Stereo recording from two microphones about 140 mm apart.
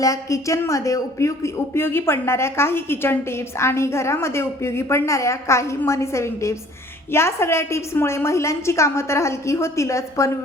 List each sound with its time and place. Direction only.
0.0 s speech: 25° left (ahead or behind)